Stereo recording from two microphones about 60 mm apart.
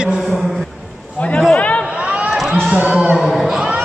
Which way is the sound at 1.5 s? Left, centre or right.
Left.